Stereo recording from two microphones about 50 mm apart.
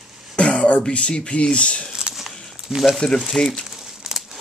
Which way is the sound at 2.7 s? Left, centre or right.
Centre.